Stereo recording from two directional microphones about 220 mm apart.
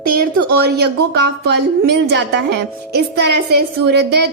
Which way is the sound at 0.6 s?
45° right (ahead or behind).